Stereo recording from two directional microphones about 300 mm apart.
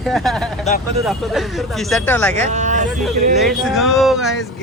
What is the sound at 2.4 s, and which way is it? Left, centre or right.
Speech, right.